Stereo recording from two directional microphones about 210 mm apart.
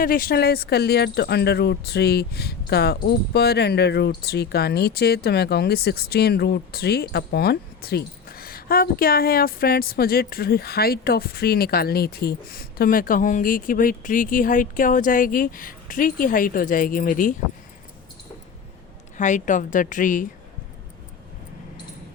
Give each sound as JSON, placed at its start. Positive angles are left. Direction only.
{"t": 0.0, "sound": "speech", "side_deg": 45}
{"t": 19.1, "sound": "speech", "side_deg": 35}